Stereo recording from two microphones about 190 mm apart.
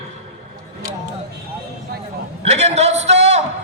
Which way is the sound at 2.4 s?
35° right (ahead or behind).